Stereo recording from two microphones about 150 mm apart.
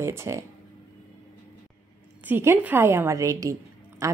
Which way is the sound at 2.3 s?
15° right (ahead or behind).